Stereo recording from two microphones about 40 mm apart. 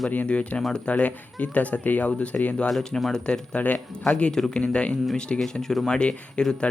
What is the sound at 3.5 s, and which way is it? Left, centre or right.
Speech, left.